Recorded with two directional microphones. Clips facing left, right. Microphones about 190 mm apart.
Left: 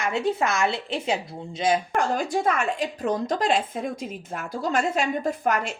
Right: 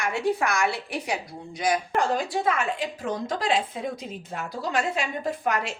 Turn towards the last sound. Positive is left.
turn(degrees=45)  # may be behind; listen again after turning